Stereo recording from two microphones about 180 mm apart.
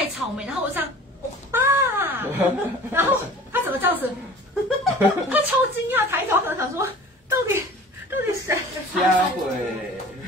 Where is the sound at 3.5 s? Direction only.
10° right (ahead or behind).